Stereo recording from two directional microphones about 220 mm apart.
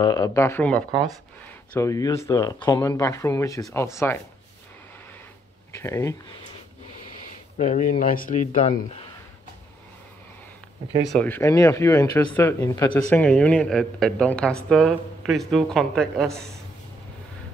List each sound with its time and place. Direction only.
0.0 s speech: 15° left (ahead or behind)
5.7 s speech: 15° left (ahead or behind)
7.5 s speech: 30° left (ahead or behind)
11.1 s speech: 5° left (ahead or behind)